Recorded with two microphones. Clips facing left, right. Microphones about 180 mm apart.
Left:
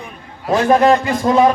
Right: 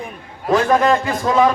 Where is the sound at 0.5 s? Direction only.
25° left (ahead or behind).